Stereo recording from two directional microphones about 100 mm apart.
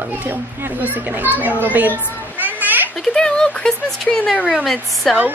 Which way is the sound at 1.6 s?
15° right (ahead or behind).